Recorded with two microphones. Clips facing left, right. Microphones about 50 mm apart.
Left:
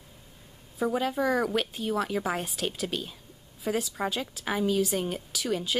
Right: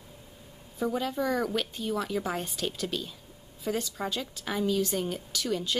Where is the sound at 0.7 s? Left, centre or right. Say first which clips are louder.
Left 2 dB; centre.